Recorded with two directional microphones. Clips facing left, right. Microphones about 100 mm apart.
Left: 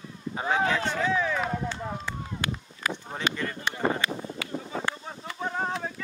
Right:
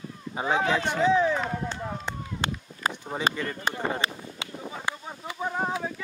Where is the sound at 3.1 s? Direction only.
10° right (ahead or behind).